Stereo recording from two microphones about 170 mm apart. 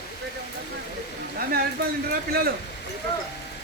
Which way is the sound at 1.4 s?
60° right (ahead or behind).